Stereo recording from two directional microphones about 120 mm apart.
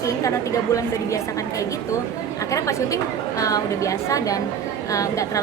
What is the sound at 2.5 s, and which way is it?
A woman's voice, 25° left (ahead or behind).